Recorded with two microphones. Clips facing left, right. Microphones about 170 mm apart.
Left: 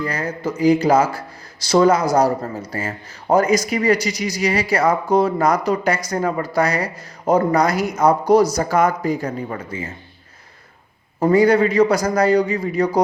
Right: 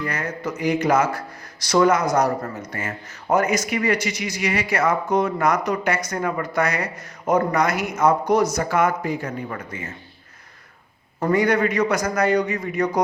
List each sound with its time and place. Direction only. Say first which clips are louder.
0.0 s speech: left 3 dB; 30° left (ahead or behind)
11.2 s speech: left 5 dB; 30° left (ahead or behind)